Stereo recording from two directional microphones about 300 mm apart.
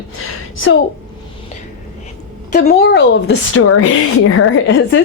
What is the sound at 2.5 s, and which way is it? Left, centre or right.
A woman's voice, left.